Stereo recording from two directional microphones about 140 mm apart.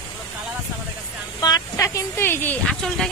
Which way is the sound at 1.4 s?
25° left (ahead or behind).